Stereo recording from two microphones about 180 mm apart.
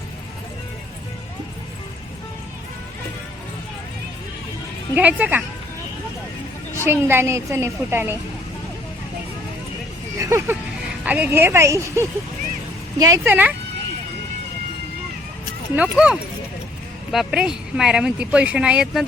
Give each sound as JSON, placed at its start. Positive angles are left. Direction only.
{"t": 4.9, "sound": "a woman's voice", "side_deg": -10}
{"t": 6.8, "sound": "a woman's voice", "side_deg": -10}
{"t": 10.2, "sound": "a woman's voice", "side_deg": -15}
{"t": 15.7, "sound": "speech", "side_deg": -5}